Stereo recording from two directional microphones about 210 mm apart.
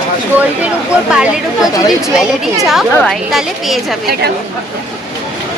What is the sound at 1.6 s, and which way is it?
Speech, 15° left (ahead or behind).